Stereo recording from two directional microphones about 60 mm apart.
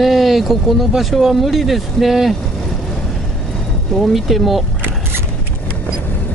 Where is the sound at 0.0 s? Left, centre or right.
Centre.